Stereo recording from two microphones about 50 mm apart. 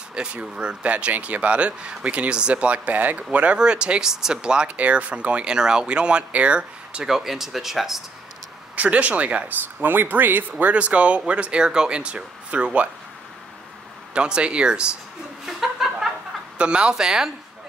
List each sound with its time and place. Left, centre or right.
0.1 s speech: right
7.1 s speech: centre
8.7 s speech: right
9.8 s speech: right
10.6 s speech: right
14.1 s speech: right
15.4 s chuckle: centre
16.5 s speech: centre